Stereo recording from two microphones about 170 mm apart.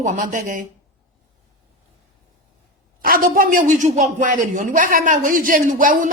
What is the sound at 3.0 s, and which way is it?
Speech, 55° right (ahead or behind).